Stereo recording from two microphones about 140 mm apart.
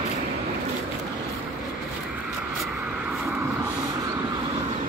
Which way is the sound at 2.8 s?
5° right (ahead or behind).